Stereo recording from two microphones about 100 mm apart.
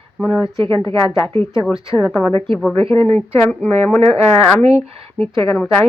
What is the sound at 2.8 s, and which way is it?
Speech, 75° right (ahead or behind).